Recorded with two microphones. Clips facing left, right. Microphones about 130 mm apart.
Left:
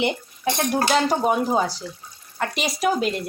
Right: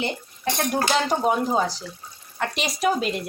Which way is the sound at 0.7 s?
Centre (ahead or behind).